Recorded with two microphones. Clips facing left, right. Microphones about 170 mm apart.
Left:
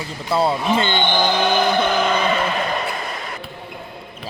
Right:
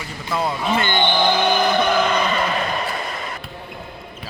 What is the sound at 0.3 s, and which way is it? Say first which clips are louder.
Speech: left 3 dB; 30° left (ahead or behind).